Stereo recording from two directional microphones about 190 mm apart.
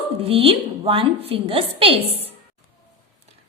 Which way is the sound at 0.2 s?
30° right (ahead or behind).